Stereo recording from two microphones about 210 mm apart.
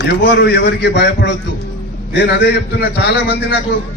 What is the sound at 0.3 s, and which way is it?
A man's voice, 55° left (ahead or behind).